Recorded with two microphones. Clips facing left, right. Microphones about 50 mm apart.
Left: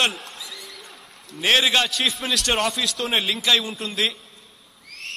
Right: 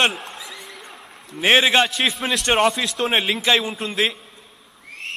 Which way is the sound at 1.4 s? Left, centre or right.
Right.